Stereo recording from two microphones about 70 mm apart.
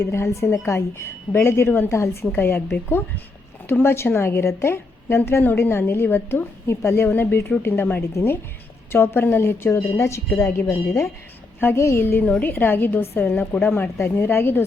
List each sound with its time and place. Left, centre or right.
0.0 s a woman's voice: left
3.7 s a woman's voice: left
8.1 s a woman's voice: left
12.2 s a woman's voice: left